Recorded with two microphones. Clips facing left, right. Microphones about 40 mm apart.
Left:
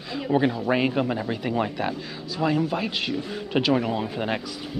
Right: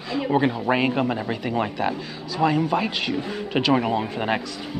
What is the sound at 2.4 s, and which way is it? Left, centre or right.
Speech, centre.